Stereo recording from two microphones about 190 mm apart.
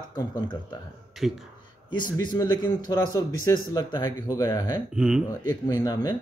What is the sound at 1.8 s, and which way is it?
A man's voice, 25° left (ahead or behind).